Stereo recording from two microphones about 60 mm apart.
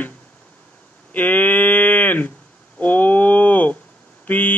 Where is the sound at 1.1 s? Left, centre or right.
Left.